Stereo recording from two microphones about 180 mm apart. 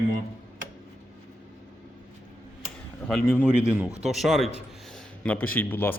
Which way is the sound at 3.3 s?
5° right (ahead or behind).